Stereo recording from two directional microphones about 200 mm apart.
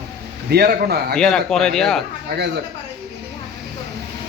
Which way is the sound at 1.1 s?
5° left (ahead or behind).